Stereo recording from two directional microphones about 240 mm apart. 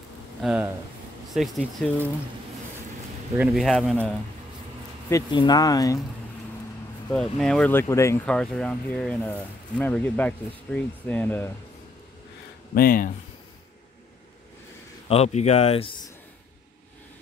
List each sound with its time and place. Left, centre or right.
0.4 s speech: centre
3.3 s speech: centre
5.1 s speech: centre
7.1 s speech: centre
12.7 s speech: left
15.0 s speech: left